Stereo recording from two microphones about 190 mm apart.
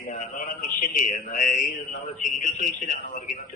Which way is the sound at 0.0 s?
45° left (ahead or behind).